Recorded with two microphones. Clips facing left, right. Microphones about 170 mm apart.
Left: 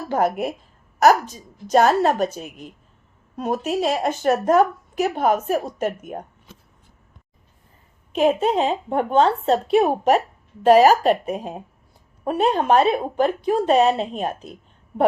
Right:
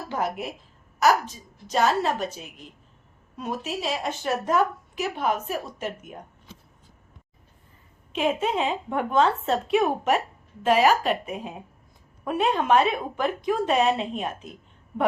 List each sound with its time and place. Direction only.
0.1 s speech: 50° left (ahead or behind)
1.6 s speech: 50° left (ahead or behind)
8.1 s speech: 40° left (ahead or behind)